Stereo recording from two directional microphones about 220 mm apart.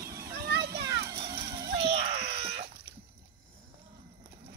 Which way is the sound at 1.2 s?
25° right (ahead or behind).